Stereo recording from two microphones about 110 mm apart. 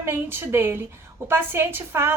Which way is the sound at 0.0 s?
20° right (ahead or behind).